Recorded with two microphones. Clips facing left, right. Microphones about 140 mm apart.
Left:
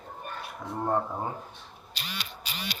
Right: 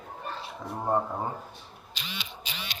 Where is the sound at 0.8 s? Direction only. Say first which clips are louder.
Right 1 dB; 10° right (ahead or behind).